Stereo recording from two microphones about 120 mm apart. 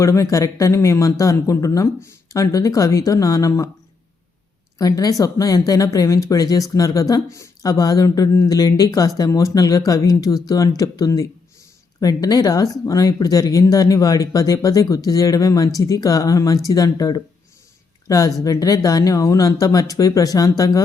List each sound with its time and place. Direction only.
0.0 s speech: 25° left (ahead or behind)
4.8 s speech: 30° left (ahead or behind)